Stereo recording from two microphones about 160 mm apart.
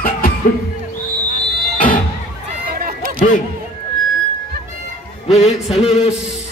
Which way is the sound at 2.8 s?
65° right (ahead or behind).